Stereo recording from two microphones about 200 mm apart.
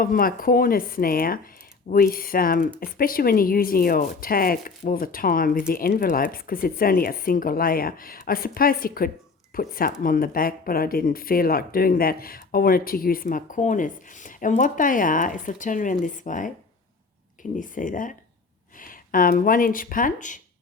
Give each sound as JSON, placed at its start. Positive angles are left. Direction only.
{"t": 0.0, "sound": "speech", "side_deg": 45}
{"t": 17.6, "sound": "speech", "side_deg": 40}